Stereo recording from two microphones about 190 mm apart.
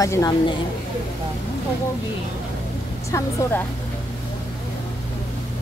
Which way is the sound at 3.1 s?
15° left (ahead or behind).